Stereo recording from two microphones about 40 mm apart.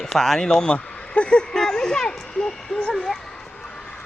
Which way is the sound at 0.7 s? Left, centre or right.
Left.